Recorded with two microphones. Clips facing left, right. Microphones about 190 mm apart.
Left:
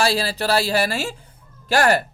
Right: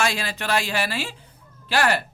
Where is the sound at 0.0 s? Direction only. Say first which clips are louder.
Left 5 dB; 35° left (ahead or behind).